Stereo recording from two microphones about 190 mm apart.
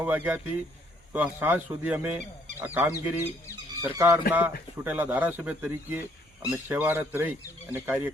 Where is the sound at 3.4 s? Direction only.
15° left (ahead or behind).